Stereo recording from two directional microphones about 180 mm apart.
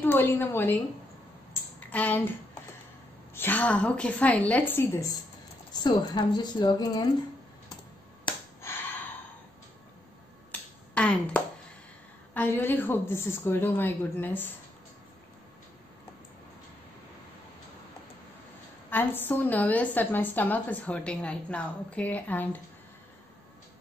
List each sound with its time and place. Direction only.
0.0 s a woman's voice: 10° left (ahead or behind)
1.5 s a sound: 10° left (ahead or behind)
3.3 s a woman's voice: 10° left (ahead or behind)
5.7 s a woman's voice: 25° left (ahead or behind)
11.0 s a woman's voice: 5° left (ahead or behind)
18.9 s a woman's voice: 10° left (ahead or behind)